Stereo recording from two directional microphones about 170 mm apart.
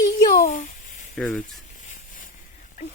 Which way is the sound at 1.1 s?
5° left (ahead or behind).